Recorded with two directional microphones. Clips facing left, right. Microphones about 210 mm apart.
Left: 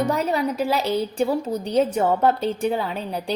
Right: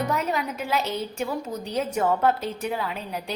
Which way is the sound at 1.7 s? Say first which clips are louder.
Left 4 dB; 30° left (ahead or behind).